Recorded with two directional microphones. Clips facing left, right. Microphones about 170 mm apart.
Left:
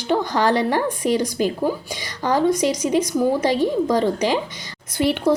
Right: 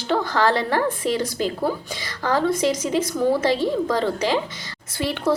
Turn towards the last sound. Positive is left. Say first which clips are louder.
# left 4 dB
turn(degrees=15)  # may be behind; listen again after turning